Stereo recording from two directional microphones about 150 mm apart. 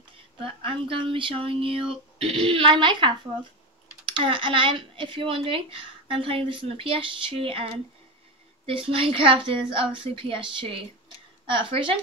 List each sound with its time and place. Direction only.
0.4 s speech: 35° right (ahead or behind)